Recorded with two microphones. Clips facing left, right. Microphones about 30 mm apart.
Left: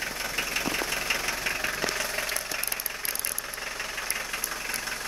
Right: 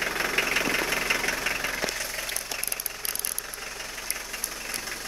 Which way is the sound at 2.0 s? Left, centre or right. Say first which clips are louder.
Left 3 dB; left.